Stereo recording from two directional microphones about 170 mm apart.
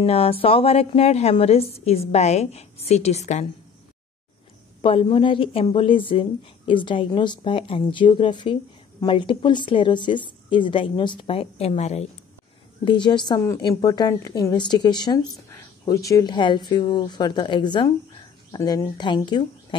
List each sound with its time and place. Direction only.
0.0 s a woman's voice: 35° left (ahead or behind)
4.8 s a woman's voice: 30° left (ahead or behind)
12.8 s a woman's voice: 30° left (ahead or behind)